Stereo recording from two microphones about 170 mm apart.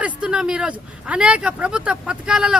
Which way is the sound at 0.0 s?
5° right (ahead or behind).